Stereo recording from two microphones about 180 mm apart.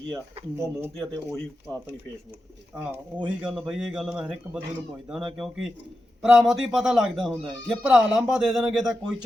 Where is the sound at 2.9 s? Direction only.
5° right (ahead or behind).